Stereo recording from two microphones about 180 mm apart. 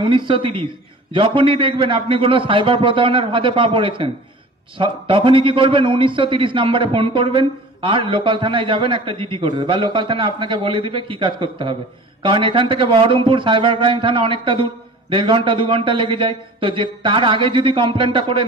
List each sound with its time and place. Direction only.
0.0 s a man's voice: 30° right (ahead or behind)